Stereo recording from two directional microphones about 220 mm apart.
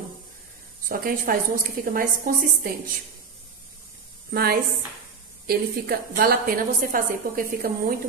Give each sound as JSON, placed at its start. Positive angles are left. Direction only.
{"t": 0.8, "sound": "a woman's voice", "side_deg": -40}
{"t": 4.3, "sound": "a woman's voice", "side_deg": -45}